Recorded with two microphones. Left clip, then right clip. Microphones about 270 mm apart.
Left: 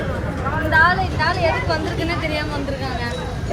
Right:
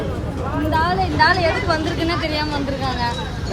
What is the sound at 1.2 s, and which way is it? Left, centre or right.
Speech, right.